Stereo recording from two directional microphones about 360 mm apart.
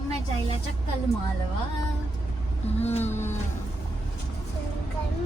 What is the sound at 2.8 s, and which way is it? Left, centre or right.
Speech, centre.